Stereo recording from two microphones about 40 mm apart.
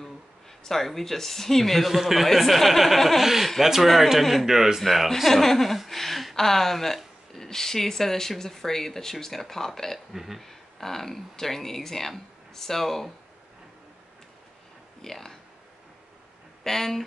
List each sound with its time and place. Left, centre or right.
0.7 s a man's voice: centre
4.8 s speech: centre
9.9 s speech: centre
10.4 s speech: centre
15.0 s speech: centre
16.6 s speech: centre